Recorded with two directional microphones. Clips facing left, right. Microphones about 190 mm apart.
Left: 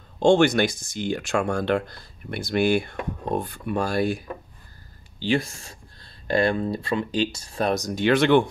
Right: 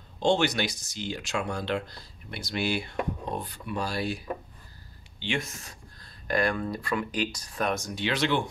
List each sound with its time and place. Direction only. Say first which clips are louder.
0.2 s speech: left 7 dB; 50° left (ahead or behind)
5.2 s speech: left 8 dB; 35° left (ahead or behind); by 8.5 s 55° left (ahead or behind)